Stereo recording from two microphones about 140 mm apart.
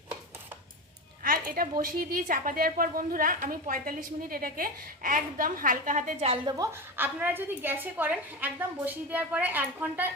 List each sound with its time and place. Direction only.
1.2 s a woman's voice: 90° right; by 6.1 s 70° right (ahead or behind)
6.1 s a woman's voice: 40° right (ahead or behind)
6.6 s a woman's voice: 15° right (ahead or behind)